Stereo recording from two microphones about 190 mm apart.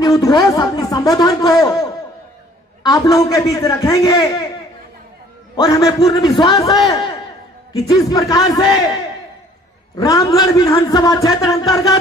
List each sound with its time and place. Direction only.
0.0 s a sound: 20° left (ahead or behind)
2.8 s a man's voice: 20° left (ahead or behind)
5.6 s a man's voice: 20° left (ahead or behind)
9.9 s a man's voice: 20° left (ahead or behind)